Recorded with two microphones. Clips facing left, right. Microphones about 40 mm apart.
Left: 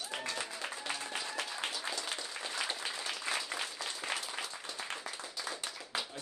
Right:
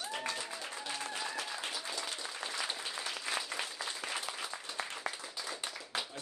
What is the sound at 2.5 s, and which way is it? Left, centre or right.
Applause, centre.